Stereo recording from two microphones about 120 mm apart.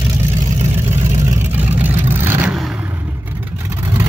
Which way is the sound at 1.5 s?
15° right (ahead or behind).